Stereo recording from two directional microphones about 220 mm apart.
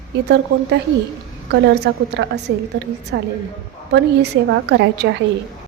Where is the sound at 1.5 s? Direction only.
50° right (ahead or behind).